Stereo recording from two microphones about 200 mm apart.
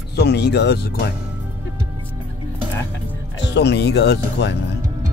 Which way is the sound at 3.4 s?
60° left (ahead or behind).